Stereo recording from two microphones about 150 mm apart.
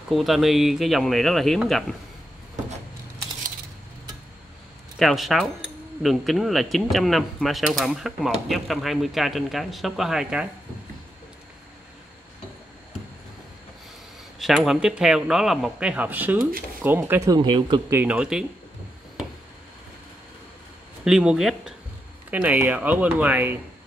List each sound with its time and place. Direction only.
0.1 s speech: centre (ahead or behind)
4.9 s speech: centre (ahead or behind)
14.4 s speech: centre (ahead or behind); by 17.8 s 30° right (ahead or behind)
17.8 s speech: 15° right (ahead or behind)
21.0 s speech: 5° right (ahead or behind)